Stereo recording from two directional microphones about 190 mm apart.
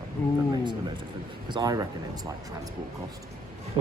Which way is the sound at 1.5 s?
20° right (ahead or behind).